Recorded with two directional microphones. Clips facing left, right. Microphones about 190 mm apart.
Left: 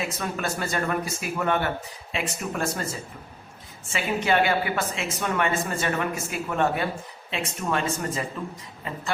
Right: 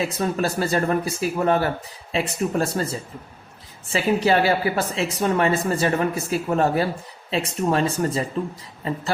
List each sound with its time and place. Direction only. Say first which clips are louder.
0.0 s speech: right 6 dB; 35° right (ahead or behind)
3.9 s speech: right 4 dB; 35° right (ahead or behind)